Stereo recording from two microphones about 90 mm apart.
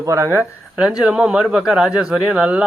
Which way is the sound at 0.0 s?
35° right (ahead or behind).